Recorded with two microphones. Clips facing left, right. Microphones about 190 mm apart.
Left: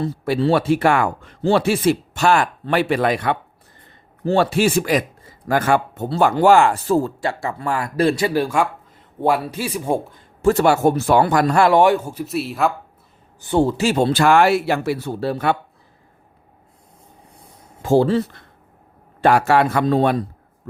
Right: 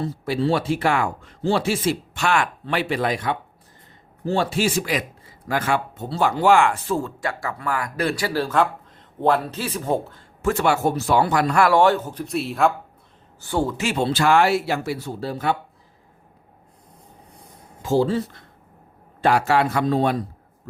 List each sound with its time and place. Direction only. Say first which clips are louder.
0.0 s speech: left 3 dB; 65° left (ahead or behind)
2.1 s a man's voice: left 5 dB; 40° left (ahead or behind); by 10.2 s 15° left (ahead or behind)
10.4 s a man's voice: left 5 dB; 40° left (ahead or behind)
10.9 s speech: left 4 dB; 55° left (ahead or behind)
11.5 s speech: left 2 dB; 25° left (ahead or behind); by 12.7 s centre (ahead or behind)
13.4 s speech: left 6 dB; 20° left (ahead or behind); by 15.5 s 65° left (ahead or behind)
17.8 s speech: left 4 dB; 60° left (ahead or behind)